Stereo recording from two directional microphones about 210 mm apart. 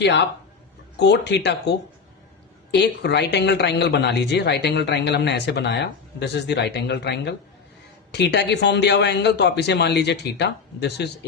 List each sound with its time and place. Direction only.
0.0 s speech: 55° left (ahead or behind)
2.7 s speech: 55° left (ahead or behind)